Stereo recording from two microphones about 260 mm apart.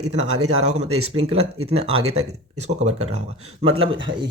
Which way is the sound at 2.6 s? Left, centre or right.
Right.